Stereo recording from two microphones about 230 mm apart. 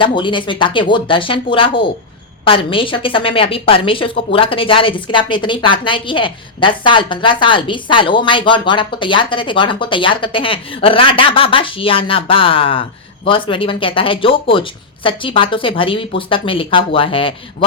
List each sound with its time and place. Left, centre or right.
0.2 s a woman's voice: left